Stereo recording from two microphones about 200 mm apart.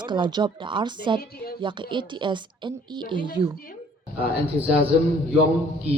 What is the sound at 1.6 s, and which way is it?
A woman's voice, 25° right (ahead or behind).